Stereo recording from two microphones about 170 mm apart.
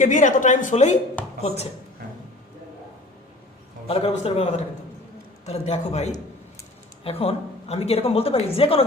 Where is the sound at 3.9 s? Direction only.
35° left (ahead or behind).